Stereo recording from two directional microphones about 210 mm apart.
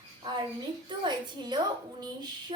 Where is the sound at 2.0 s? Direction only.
20° right (ahead or behind).